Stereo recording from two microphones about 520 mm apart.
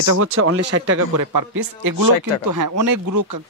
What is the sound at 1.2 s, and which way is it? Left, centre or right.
Speech, right.